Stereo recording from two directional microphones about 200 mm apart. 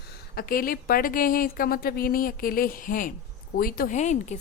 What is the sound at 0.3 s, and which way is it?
A woman's voice, 45° left (ahead or behind).